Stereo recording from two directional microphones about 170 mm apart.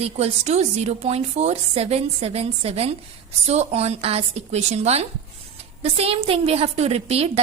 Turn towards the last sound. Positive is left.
turn(degrees=-35)  # may be behind; listen again after turning